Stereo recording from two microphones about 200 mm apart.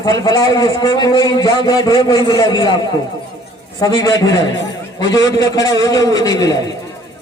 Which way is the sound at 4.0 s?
20° left (ahead or behind).